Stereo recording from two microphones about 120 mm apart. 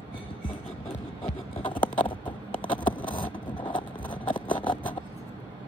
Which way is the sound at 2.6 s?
45° left (ahead or behind).